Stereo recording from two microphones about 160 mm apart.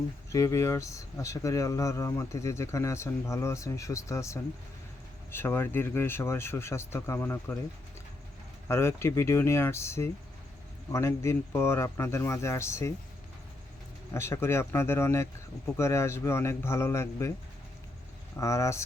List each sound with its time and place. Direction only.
0.3 s speech: 20° left (ahead or behind)
8.6 s speech: 15° left (ahead or behind)
14.1 s speech: 15° left (ahead or behind)
18.3 s speech: 20° left (ahead or behind)